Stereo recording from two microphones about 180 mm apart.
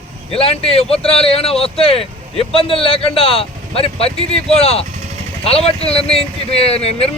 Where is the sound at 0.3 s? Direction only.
30° left (ahead or behind).